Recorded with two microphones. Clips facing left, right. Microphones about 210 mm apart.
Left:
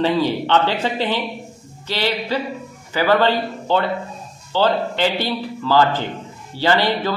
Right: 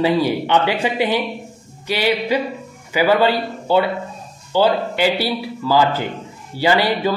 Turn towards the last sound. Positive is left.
turn(degrees=-10)  # may be behind; listen again after turning